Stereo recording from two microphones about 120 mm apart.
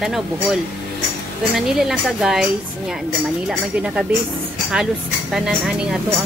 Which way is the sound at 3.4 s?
5° right (ahead or behind).